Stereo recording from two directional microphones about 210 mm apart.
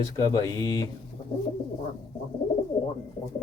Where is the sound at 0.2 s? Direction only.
15° left (ahead or behind).